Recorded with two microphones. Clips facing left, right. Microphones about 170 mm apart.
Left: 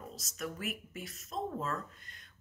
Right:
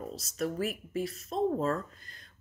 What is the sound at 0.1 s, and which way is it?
Speech, 35° right (ahead or behind).